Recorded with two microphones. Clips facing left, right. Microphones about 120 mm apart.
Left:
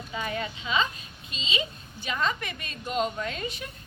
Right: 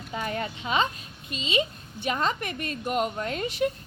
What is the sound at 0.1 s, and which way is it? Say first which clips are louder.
Speech: right 2 dB; 45° right (ahead or behind).